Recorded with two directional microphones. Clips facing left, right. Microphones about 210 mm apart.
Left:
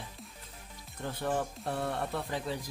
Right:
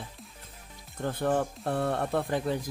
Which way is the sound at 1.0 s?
55° right (ahead or behind).